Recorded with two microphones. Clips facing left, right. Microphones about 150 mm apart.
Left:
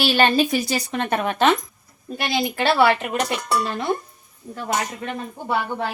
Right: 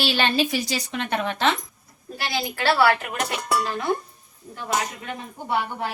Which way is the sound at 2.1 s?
20° left (ahead or behind).